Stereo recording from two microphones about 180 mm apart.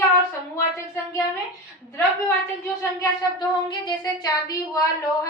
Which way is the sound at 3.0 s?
25° left (ahead or behind).